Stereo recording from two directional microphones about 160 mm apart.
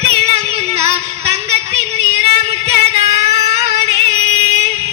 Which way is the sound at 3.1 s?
45° right (ahead or behind).